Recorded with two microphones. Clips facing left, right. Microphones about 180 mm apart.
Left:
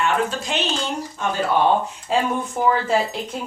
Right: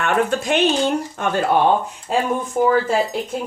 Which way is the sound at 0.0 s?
55° right (ahead or behind).